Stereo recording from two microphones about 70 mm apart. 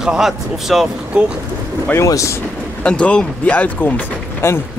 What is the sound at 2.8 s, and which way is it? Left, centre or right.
Speech, centre.